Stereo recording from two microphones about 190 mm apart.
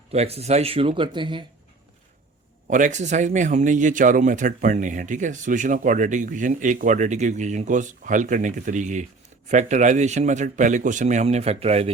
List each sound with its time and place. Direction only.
0.1 s speech: 35° right (ahead or behind)
2.6 s speech: 45° right (ahead or behind)